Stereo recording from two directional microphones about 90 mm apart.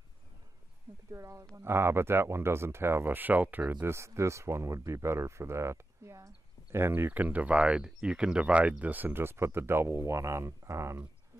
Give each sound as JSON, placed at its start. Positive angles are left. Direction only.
{"t": 1.1, "sound": "speech", "side_deg": -35}